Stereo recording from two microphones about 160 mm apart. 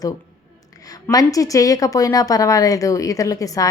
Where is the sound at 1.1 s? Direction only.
20° left (ahead or behind).